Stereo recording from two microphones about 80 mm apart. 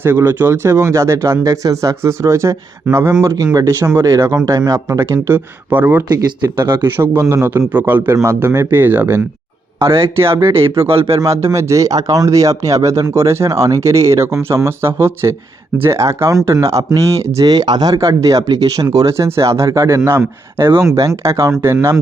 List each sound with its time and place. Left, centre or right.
0.0 s speech: right
3.3 s speech: right
3.7 s speech: right
4.0 s speech: right
5.3 s speech: right
6.1 s speech: right
8.1 s speech: right
17.5 s speech: right
19.1 s speech: right